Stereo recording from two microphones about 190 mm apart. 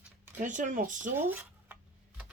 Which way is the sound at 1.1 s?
10° right (ahead or behind).